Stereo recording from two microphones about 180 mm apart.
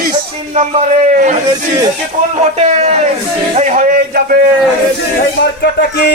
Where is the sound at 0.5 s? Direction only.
45° right (ahead or behind).